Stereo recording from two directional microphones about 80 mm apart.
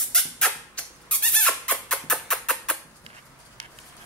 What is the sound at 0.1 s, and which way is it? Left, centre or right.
Music, centre.